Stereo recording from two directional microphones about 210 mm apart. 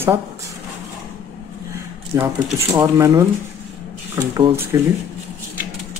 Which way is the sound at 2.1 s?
10° right (ahead or behind).